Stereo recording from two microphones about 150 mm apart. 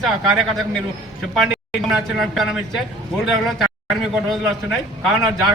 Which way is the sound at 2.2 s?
Centre (ahead or behind).